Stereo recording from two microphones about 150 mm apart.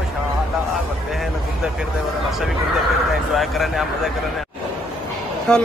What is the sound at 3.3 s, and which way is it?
Speech, centre (ahead or behind).